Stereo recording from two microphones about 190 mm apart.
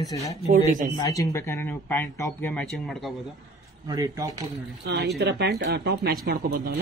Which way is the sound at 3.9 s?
20° right (ahead or behind).